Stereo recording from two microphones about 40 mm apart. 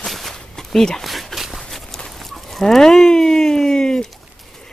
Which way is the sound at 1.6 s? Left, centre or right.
Centre.